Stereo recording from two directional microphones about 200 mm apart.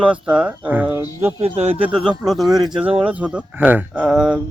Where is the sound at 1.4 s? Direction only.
30° right (ahead or behind).